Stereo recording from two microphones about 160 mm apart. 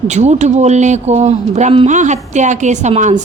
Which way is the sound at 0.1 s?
45° right (ahead or behind).